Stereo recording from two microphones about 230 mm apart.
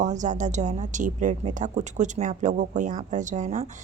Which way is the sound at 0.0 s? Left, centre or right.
Right.